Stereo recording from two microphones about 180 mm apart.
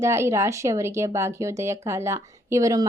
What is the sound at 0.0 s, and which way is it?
Speech, 15° right (ahead or behind).